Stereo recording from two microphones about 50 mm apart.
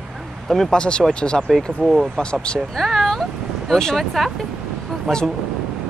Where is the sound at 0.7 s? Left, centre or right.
Centre.